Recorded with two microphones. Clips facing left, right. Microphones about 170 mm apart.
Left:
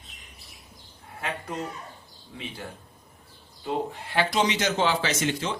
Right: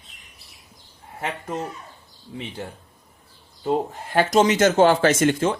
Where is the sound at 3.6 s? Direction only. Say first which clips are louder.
Right 6 dB; 45° right (ahead or behind).